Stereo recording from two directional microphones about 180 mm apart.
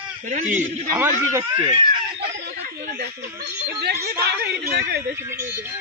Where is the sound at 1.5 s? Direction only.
25° right (ahead or behind).